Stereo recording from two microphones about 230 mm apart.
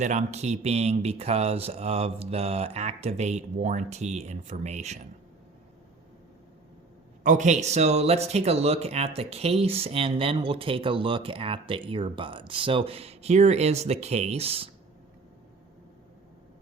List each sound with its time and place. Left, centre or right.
0.0 s speech: right
7.3 s speech: right